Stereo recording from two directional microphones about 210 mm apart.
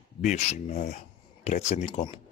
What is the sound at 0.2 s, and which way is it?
Speech, 30° left (ahead or behind).